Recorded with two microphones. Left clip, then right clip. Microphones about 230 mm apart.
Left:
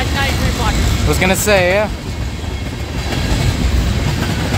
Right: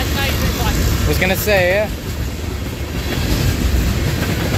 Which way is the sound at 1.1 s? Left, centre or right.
Centre.